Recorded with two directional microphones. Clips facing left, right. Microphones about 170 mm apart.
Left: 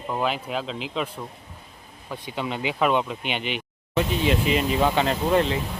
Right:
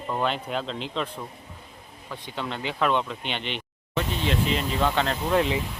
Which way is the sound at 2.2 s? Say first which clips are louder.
Left 3 dB; 10° left (ahead or behind).